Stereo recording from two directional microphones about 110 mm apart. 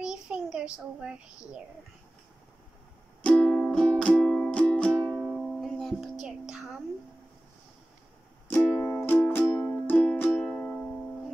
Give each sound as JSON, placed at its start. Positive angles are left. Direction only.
{"t": 0.0, "sound": "a child's voice", "side_deg": -5}
{"t": 3.2, "sound": "music", "side_deg": 10}
{"t": 6.2, "sound": "a sound", "side_deg": -5}
{"t": 8.5, "sound": "music", "side_deg": 20}